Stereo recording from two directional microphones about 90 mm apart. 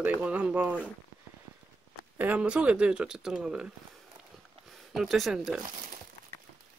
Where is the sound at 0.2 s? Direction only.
15° right (ahead or behind).